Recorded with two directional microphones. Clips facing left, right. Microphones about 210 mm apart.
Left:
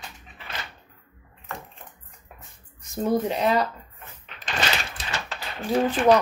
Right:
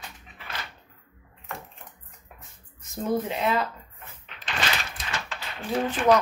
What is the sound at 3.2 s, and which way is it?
Speech, 35° left (ahead or behind).